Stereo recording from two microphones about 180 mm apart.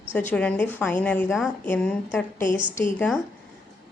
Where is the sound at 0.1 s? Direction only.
10° left (ahead or behind).